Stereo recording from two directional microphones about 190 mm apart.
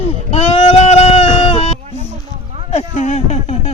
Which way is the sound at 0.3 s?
30° left (ahead or behind).